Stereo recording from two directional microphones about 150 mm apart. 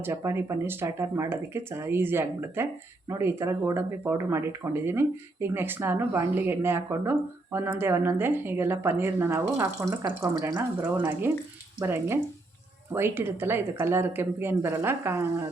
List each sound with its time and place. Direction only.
0.0 s speech: 20° right (ahead or behind)